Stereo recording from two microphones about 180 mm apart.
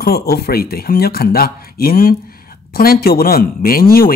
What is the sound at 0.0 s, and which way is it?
Speech, 60° left (ahead or behind).